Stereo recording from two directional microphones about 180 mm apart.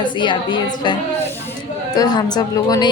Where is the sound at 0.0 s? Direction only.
25° left (ahead or behind).